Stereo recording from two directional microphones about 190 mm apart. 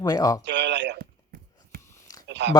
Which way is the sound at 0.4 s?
65° right (ahead or behind).